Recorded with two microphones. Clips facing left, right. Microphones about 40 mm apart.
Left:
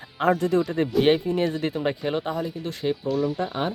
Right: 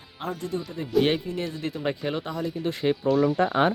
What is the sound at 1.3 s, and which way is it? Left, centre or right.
Speech, left.